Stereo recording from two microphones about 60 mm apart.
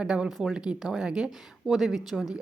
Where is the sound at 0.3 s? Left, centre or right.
Centre.